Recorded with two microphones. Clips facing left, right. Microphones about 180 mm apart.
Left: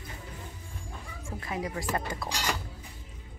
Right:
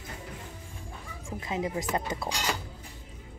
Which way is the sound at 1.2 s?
20° right (ahead or behind).